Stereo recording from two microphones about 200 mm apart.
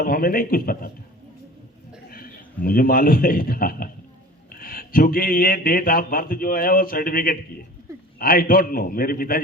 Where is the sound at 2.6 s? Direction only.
45° left (ahead or behind).